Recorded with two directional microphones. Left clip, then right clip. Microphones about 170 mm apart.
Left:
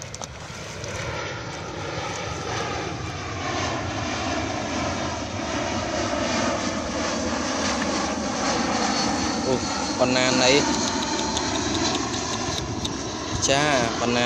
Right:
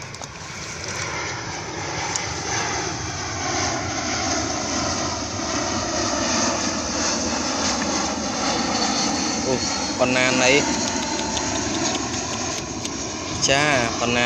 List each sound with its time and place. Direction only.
3.5 s vehicle: 30° left (ahead or behind); by 9.8 s 5° right (ahead or behind)
9.9 s speech: 5° left (ahead or behind)
10.6 s vehicle: 25° right (ahead or behind)
13.4 s speech: centre (ahead or behind)